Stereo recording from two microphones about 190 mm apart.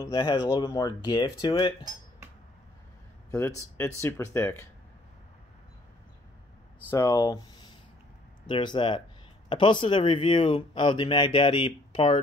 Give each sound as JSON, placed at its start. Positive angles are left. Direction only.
{"t": 0.0, "sound": "speech", "side_deg": 20}
{"t": 3.3, "sound": "speech", "side_deg": 10}
{"t": 6.9, "sound": "speech", "side_deg": 15}